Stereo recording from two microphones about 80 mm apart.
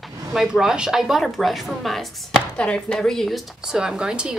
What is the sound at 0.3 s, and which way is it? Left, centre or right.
A woman's voice, centre.